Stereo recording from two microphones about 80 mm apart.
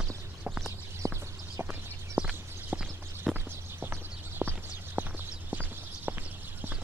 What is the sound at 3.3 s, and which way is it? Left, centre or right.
Clip-clop, right.